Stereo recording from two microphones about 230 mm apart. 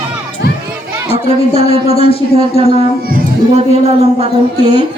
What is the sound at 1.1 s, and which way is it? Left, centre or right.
Speech, left.